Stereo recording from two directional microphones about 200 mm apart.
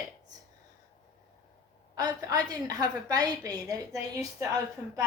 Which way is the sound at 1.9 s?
20° right (ahead or behind).